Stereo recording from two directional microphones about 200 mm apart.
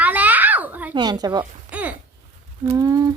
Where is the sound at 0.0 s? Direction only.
10° right (ahead or behind).